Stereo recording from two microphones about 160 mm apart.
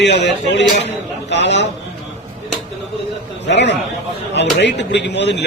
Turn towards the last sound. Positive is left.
turn(degrees=90)